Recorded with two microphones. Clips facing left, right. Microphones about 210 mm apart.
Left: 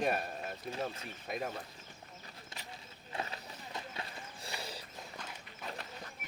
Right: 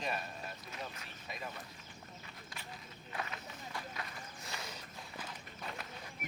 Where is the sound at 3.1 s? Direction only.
25° left (ahead or behind).